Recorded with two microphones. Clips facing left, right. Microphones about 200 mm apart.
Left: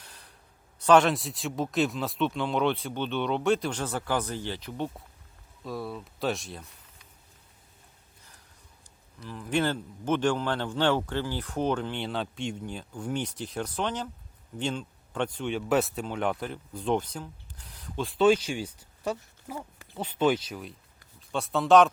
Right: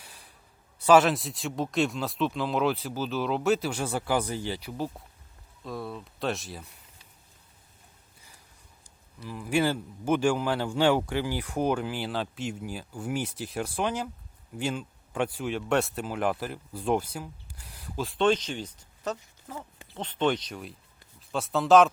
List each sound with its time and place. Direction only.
0.0 s a sound: 10° right (ahead or behind)
0.8 s speech: 5° right (ahead or behind)
5.6 s speech: centre (ahead or behind)
8.8 s a man's voice: 10° right (ahead or behind)